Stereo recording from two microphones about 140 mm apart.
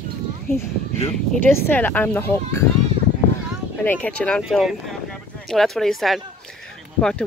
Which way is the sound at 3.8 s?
10° left (ahead or behind).